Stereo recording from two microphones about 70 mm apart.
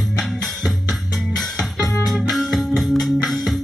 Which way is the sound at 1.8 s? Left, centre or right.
Left.